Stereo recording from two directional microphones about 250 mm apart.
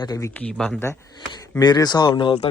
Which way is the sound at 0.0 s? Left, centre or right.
Centre.